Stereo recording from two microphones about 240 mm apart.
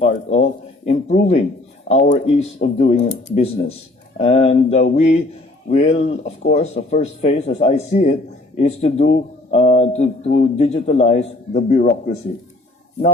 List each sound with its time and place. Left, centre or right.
0.3 s speech: left
10.2 s a man's voice: left
10.5 s speech: left